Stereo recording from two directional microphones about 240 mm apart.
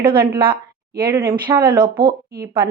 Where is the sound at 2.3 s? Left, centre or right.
Right.